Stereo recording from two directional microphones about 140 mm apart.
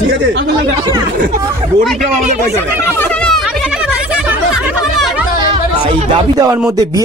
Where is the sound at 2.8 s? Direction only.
15° left (ahead or behind).